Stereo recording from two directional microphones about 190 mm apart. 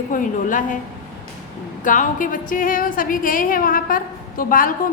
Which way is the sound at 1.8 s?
45° left (ahead or behind).